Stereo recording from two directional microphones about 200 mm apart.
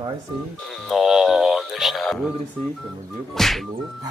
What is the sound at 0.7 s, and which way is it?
Speech, centre (ahead or behind).